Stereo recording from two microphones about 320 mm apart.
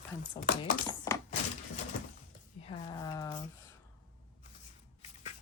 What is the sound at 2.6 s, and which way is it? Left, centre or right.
Speech, centre.